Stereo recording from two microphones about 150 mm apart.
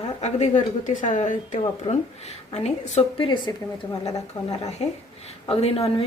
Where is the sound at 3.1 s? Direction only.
35° left (ahead or behind).